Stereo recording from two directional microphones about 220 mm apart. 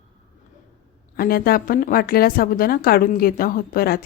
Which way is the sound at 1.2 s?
45° left (ahead or behind).